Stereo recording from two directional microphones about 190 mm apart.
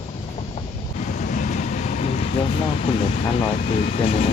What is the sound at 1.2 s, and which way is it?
Vehicle, 40° left (ahead or behind).